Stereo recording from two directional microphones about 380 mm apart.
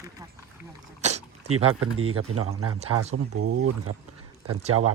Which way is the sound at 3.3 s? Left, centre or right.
Right.